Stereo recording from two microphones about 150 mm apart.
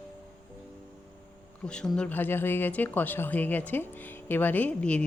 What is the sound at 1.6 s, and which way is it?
Speech, 5° left (ahead or behind).